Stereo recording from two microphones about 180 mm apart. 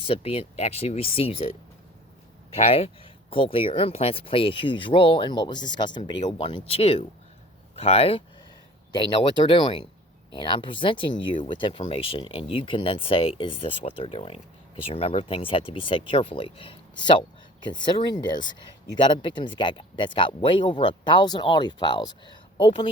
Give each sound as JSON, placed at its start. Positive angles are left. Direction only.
{"t": 0.0, "sound": "speech", "side_deg": 30}
{"t": 2.6, "sound": "speech", "side_deg": 30}